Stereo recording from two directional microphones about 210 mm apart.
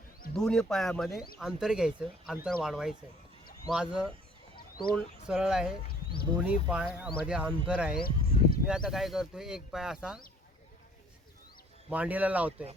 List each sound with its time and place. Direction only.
0.3 s speech: 5° left (ahead or behind)
5.3 s speech: 5° right (ahead or behind)
7.9 s a sound: 45° left (ahead or behind)
8.6 s speech: 5° right (ahead or behind)
11.9 s speech: 5° right (ahead or behind)